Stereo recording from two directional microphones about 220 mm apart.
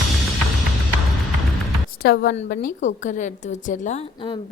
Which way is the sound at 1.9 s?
45° left (ahead or behind).